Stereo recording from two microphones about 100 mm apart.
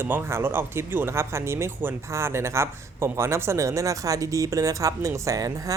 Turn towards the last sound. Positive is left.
turn(degrees=-35)  # may be behind; listen again after turning